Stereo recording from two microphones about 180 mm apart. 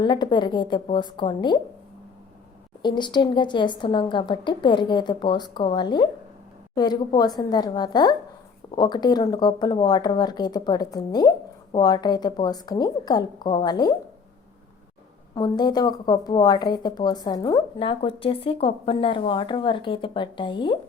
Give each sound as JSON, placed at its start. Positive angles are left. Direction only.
{"t": 0.0, "sound": "speech", "side_deg": 25}
{"t": 2.8, "sound": "speech", "side_deg": 25}
{"t": 15.4, "sound": "speech", "side_deg": 25}